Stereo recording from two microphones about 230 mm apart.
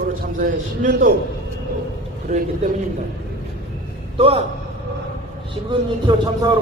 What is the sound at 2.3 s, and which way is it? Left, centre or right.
Speech, right.